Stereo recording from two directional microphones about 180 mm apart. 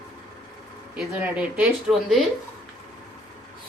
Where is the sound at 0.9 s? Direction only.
5° right (ahead or behind).